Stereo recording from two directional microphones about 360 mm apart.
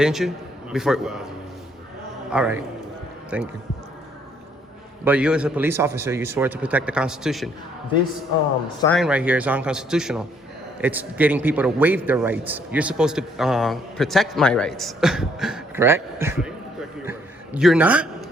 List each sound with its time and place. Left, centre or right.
0.0 s a man's voice: centre
2.3 s a man's voice: centre
5.0 s a man's voice: centre
8.8 s a man's voice: centre